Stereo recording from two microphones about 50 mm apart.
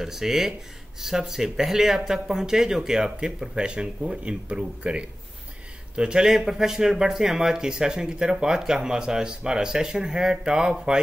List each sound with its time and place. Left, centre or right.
0.0 s speech: centre